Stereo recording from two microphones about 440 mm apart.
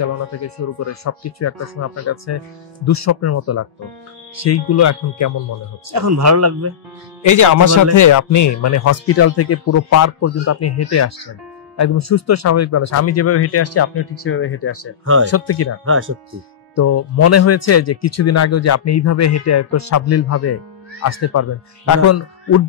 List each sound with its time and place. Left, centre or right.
0.4 s speech: left
5.9 s speech: right
7.2 s speech: left
15.8 s speech: right
16.7 s speech: left